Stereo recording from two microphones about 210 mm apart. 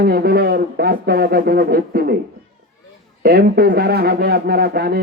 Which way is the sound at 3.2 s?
50° right (ahead or behind).